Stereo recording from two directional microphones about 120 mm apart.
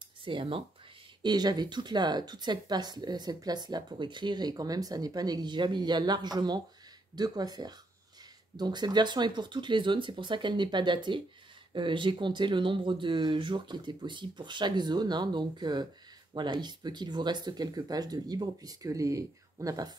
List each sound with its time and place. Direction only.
0.2 s speech: 45° right (ahead or behind)
1.2 s speech: 35° right (ahead or behind)